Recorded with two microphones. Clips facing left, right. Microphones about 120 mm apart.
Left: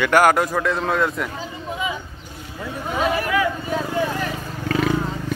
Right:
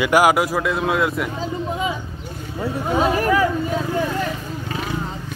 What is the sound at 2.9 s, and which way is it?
Speech, 35° right (ahead or behind).